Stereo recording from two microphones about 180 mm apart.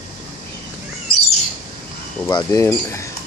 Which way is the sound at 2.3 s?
25° left (ahead or behind).